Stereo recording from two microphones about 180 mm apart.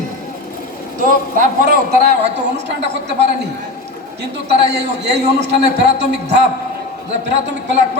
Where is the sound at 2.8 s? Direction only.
75° right (ahead or behind).